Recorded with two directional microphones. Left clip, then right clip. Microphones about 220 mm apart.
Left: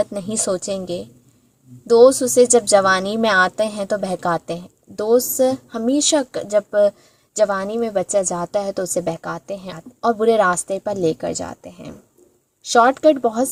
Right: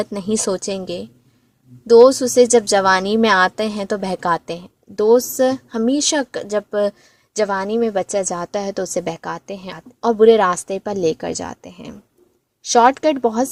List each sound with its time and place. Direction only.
0.1 s speech: 35° right (ahead or behind)